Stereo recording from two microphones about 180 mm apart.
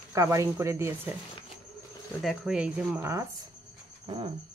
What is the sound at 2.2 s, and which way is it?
Stir, 5° right (ahead or behind).